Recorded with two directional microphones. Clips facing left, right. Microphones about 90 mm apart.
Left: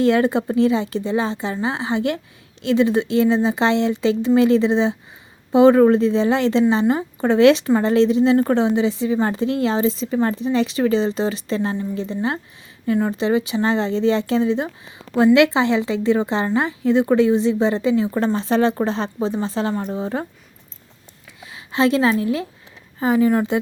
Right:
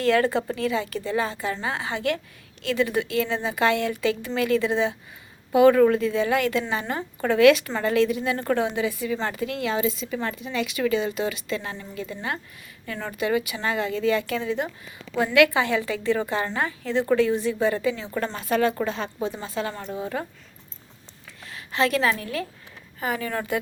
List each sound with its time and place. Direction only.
0.0 s a woman's voice: 20° left (ahead or behind)
21.4 s a woman's voice: 20° left (ahead or behind)